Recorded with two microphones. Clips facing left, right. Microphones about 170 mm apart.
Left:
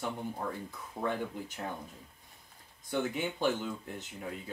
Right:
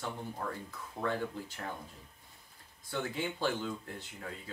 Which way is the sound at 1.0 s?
15° left (ahead or behind).